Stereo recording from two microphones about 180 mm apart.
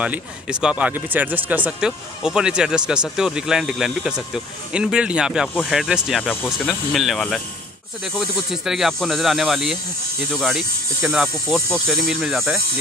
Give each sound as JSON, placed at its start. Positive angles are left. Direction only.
{"t": 0.0, "sound": "speech", "side_deg": -5}